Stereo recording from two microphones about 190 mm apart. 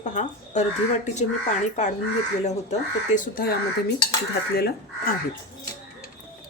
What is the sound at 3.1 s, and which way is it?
Speech, 45° left (ahead or behind).